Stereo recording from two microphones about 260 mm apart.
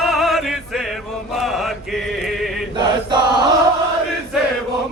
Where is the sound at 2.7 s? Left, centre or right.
Centre.